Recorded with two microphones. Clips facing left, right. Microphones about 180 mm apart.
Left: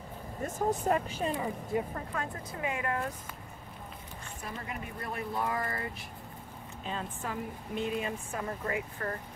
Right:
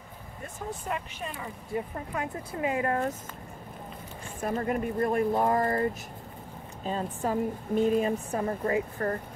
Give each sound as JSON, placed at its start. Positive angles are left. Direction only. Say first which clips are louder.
{"t": 0.6, "sound": "speech", "louder": "left 6 dB", "side_deg": 40}
{"t": 2.6, "sound": "speech", "louder": "right 6 dB", "side_deg": -30}
{"t": 4.4, "sound": "speech", "louder": "right 13 dB", "side_deg": -50}